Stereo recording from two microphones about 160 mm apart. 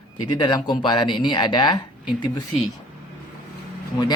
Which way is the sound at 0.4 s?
30° left (ahead or behind).